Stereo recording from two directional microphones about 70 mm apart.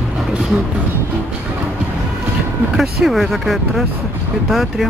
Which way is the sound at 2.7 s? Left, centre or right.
Centre.